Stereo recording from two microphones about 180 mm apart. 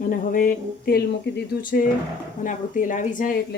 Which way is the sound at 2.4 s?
45° left (ahead or behind).